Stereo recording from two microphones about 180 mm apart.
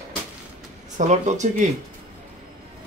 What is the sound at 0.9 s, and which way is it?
Speech, 40° right (ahead or behind).